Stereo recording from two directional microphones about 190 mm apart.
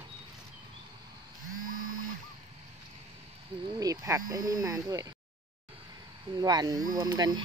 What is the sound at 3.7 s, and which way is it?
Speech, 20° right (ahead or behind).